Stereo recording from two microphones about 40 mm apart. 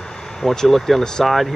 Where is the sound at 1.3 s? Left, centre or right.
Centre.